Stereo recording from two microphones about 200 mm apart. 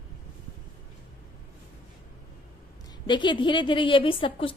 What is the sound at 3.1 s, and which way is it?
A woman's voice, 25° left (ahead or behind).